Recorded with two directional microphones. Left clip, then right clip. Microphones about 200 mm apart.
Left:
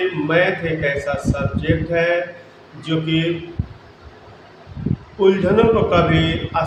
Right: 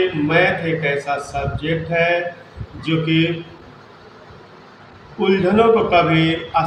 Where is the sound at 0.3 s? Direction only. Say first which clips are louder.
Even; 15° left (ahead or behind).